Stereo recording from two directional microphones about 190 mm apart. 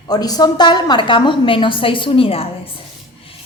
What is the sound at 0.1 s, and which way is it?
A woman's voice, 20° left (ahead or behind).